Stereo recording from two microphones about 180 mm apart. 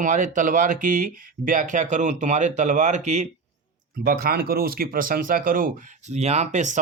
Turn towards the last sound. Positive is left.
turn(degrees=-40)  # may be behind; listen again after turning